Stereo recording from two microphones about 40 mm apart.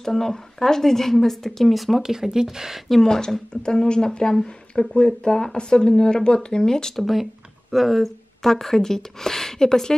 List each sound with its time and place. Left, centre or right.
0.0 s speech: centre
2.9 s speech: centre
7.0 s speech: centre